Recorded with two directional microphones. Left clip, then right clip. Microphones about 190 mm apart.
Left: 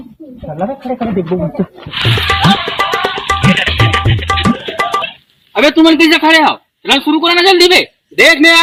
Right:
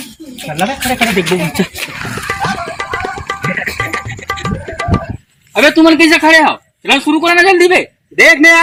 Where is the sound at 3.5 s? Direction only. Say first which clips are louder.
Left 3 dB; 25° right (ahead or behind).